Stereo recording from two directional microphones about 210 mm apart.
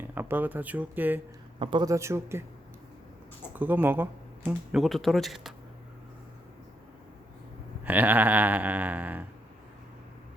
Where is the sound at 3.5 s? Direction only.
10° right (ahead or behind).